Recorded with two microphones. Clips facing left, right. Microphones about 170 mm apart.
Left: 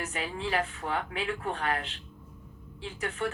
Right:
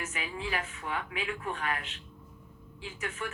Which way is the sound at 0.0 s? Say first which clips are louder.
Left 3 dB; 35° left (ahead or behind).